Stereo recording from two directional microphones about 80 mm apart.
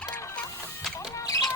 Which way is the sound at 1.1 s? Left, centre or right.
Left.